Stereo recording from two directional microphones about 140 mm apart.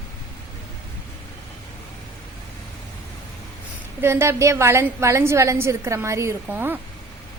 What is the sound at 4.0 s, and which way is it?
A woman's voice, 15° right (ahead or behind).